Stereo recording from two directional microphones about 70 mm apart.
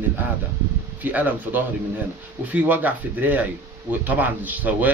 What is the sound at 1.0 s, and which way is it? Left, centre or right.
Speech, right.